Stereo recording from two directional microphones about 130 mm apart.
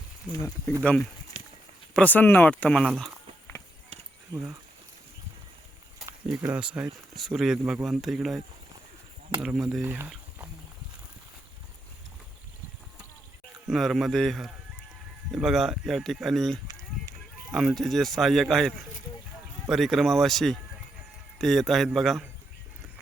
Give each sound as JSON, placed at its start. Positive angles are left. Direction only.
{"t": 0.3, "sound": "speech", "side_deg": 20}
{"t": 0.8, "sound": "speech", "side_deg": 10}
{"t": 1.3, "sound": "livestock", "side_deg": 60}
{"t": 1.9, "sound": "speech", "side_deg": 10}
{"t": 6.4, "sound": "speech", "side_deg": -10}
{"t": 9.6, "sound": "speech", "side_deg": 0}
{"t": 9.8, "sound": "speech", "side_deg": -20}
{"t": 13.7, "sound": "speech", "side_deg": 0}